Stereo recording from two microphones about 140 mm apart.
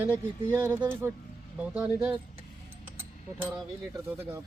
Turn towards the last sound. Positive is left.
turn(degrees=-20)  # may be behind; listen again after turning